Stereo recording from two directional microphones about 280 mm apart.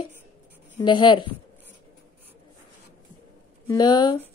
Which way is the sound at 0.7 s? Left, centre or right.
Centre.